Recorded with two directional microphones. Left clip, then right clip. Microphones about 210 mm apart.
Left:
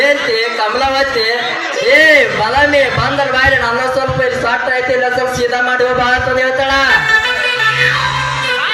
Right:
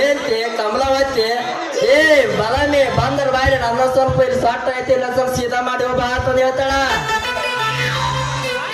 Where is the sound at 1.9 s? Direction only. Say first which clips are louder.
Left 4 dB; 60° right (ahead or behind).